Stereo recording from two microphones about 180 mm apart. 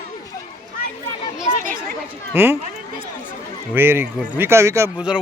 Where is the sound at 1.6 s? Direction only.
50° right (ahead or behind).